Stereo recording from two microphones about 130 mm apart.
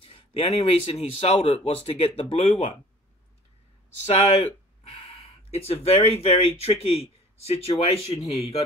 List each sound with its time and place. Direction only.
0.0 s a man's voice: 45° left (ahead or behind)
5.0 s a man's voice: 55° left (ahead or behind)